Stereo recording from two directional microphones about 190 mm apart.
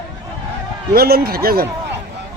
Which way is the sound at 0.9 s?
55° right (ahead or behind).